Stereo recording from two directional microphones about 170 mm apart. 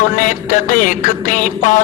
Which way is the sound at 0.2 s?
50° left (ahead or behind).